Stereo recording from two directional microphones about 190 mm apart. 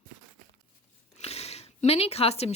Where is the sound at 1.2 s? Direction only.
35° left (ahead or behind).